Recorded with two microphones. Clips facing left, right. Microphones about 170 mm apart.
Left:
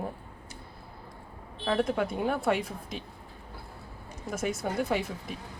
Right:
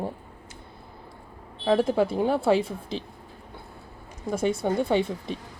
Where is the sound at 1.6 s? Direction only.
30° right (ahead or behind).